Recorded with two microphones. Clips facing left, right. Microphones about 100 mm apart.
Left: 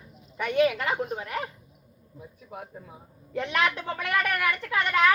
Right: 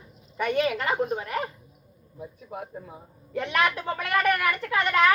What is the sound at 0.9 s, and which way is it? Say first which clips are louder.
Speech: right 3 dB; 15° right (ahead or behind).